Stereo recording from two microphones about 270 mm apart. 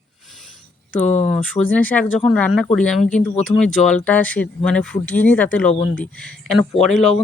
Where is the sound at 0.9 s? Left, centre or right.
Centre.